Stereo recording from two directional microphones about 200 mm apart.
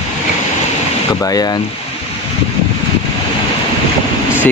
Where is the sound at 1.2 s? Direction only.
20° left (ahead or behind).